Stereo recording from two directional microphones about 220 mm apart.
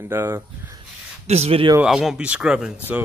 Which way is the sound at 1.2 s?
30° right (ahead or behind).